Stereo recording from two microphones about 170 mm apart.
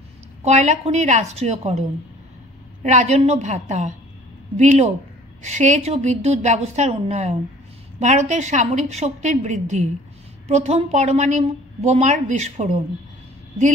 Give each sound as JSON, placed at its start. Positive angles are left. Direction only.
{"t": 0.4, "sound": "a woman's voice", "side_deg": -40}
{"t": 2.8, "sound": "a woman's voice", "side_deg": -45}